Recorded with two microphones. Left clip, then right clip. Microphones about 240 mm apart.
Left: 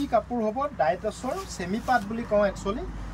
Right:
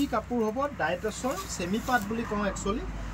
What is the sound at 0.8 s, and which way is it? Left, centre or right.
Speech, centre.